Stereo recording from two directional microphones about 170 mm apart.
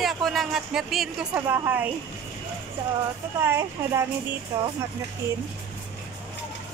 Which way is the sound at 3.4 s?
15° right (ahead or behind).